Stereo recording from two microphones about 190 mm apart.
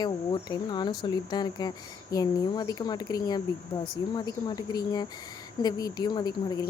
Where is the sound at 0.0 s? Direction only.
20° left (ahead or behind).